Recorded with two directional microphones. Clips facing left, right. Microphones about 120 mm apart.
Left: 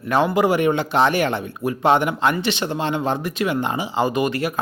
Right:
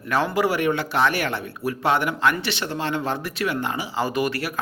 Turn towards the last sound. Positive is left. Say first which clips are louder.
# left 3 dB
turn(degrees=20)  # may be behind; listen again after turning